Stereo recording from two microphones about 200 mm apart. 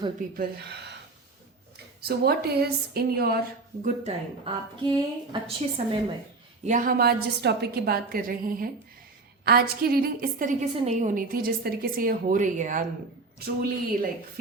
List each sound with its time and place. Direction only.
0.3 s speech: 55° right (ahead or behind)
2.0 s a woman's voice: 50° right (ahead or behind)
3.8 s a woman's voice: 30° right (ahead or behind)
6.7 s a woman's voice: 45° right (ahead or behind)